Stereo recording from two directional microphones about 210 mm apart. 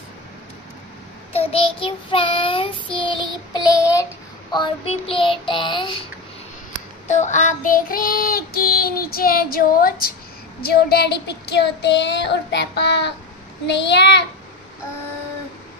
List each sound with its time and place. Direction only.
1.3 s child singing: 30° left (ahead or behind)
7.1 s child singing: 35° left (ahead or behind); by 13.1 s 55° left (ahead or behind)
13.7 s a child's voice: 55° left (ahead or behind)